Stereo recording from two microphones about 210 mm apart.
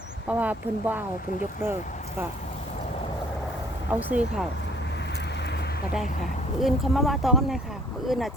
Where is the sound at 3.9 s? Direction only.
10° right (ahead or behind).